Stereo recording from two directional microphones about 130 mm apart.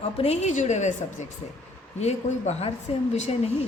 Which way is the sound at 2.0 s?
60° left (ahead or behind).